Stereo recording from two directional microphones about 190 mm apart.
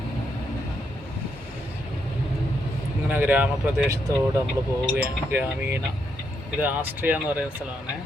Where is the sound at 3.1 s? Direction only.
10° right (ahead or behind).